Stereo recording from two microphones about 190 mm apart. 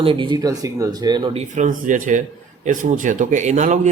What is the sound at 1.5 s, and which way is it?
Speech, 40° right (ahead or behind).